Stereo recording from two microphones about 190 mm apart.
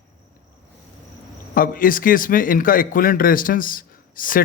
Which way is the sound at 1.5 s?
45° left (ahead or behind).